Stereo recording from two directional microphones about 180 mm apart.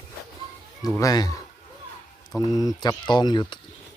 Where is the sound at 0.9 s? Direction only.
20° left (ahead or behind).